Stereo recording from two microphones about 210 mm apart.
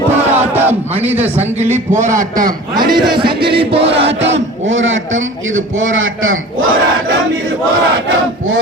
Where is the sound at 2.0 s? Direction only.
40° right (ahead or behind).